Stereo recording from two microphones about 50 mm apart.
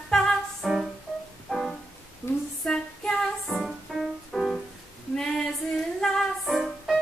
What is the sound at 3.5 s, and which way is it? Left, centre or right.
Music, centre.